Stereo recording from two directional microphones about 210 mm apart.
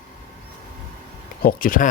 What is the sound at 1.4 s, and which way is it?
Speech, 40° left (ahead or behind).